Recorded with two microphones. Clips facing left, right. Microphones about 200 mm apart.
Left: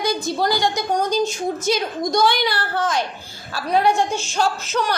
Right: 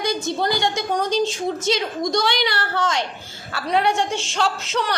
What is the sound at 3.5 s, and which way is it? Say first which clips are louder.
Speech: left 2 dB; 70° right (ahead or behind).